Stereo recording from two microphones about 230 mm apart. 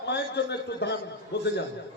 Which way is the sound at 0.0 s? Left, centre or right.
Left.